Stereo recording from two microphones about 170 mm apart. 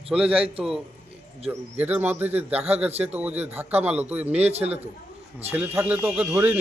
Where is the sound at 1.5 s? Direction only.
10° right (ahead or behind).